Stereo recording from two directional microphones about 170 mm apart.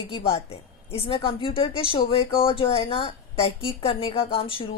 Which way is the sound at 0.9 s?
30° left (ahead or behind).